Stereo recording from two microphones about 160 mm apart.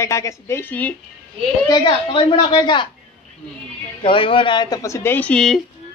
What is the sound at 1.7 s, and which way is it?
Speech, 30° left (ahead or behind).